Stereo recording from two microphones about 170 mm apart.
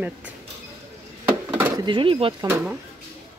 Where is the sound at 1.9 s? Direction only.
30° right (ahead or behind).